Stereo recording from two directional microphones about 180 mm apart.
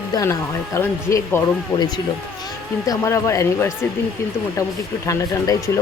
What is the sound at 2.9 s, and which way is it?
Speech, 15° left (ahead or behind).